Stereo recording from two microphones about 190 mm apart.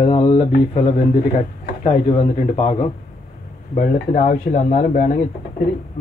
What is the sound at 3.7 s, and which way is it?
Speech, 45° left (ahead or behind).